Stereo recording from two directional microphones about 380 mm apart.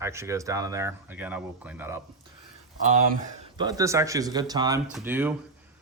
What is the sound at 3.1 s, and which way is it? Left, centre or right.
Speech, right.